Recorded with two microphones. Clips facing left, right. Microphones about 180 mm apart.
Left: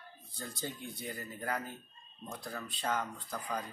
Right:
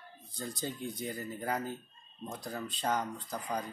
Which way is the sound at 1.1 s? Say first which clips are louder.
Right 1 dB; 15° right (ahead or behind).